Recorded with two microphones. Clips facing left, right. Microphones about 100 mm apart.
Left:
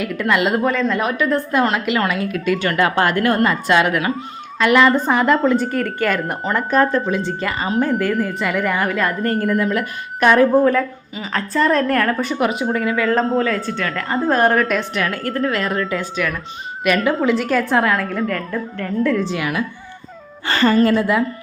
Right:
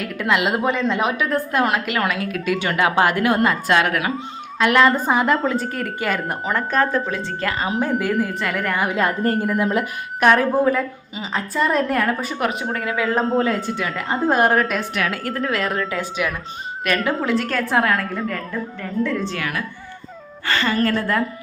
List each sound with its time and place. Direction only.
0.0 s a woman's voice: centre (ahead or behind)
0.7 s speech: 15° right (ahead or behind)
1.2 s a woman's voice: 5° right (ahead or behind)
8.9 s speech: 25° right (ahead or behind)
9.8 s a woman's voice: 5° right (ahead or behind)
11.1 s a woman's voice: 20° right (ahead or behind)
11.3 s a woman's voice: 10° right (ahead or behind)
13.4 s a woman's voice: 20° right (ahead or behind); by 16.0 s centre (ahead or behind)
16.0 s speech: 10° right (ahead or behind)
16.8 s a woman's voice: 5° left (ahead or behind)
19.4 s a woman's voice: 15° left (ahead or behind)
20.5 s a woman's voice: 40° left (ahead or behind)
20.7 s a woman's voice: 15° left (ahead or behind)